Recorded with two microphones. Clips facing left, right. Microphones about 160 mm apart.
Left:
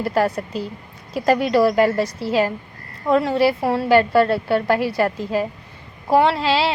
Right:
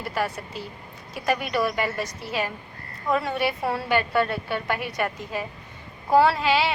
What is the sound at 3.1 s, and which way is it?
A woman's voice, 25° left (ahead or behind).